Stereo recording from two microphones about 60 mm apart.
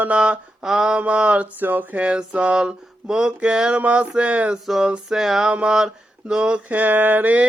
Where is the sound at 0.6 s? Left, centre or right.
Centre.